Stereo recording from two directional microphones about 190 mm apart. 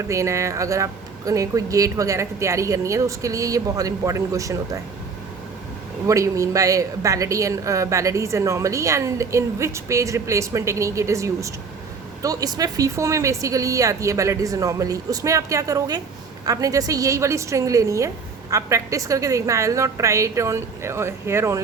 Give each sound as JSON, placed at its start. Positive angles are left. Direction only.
{"t": 0.1, "sound": "a woman's voice", "side_deg": -15}
{"t": 6.1, "sound": "a woman's voice", "side_deg": -15}